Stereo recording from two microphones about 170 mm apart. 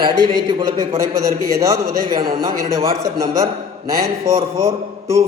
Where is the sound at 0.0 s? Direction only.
25° right (ahead or behind).